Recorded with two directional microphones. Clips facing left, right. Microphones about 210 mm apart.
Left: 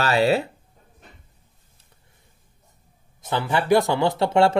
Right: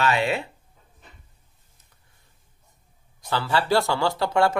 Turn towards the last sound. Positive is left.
turn(degrees=25)  # may be behind; listen again after turning